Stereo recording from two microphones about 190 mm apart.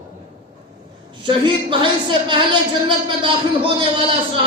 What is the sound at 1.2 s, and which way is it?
A woman's voice, 25° right (ahead or behind).